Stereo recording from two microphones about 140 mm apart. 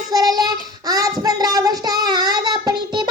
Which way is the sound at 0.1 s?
30° right (ahead or behind).